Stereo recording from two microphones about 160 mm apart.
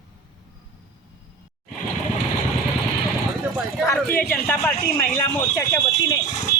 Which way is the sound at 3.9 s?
10° left (ahead or behind).